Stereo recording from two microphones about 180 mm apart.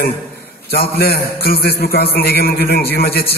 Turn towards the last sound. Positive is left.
turn(degrees=60)  # may be behind; listen again after turning